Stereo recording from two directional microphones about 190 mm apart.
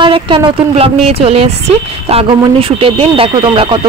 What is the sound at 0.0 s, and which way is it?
A woman's voice, 25° right (ahead or behind).